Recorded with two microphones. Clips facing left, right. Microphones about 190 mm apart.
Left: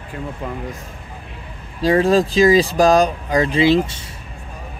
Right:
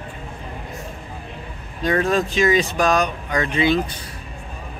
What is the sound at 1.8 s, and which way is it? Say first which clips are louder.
Speech: left 5 dB; 30° left (ahead or behind).